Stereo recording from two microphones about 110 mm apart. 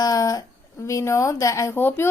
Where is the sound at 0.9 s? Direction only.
30° left (ahead or behind).